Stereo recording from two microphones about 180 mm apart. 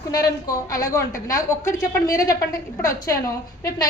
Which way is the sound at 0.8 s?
15° left (ahead or behind).